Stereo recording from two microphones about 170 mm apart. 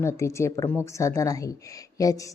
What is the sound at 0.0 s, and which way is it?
A woman's voice, 15° left (ahead or behind).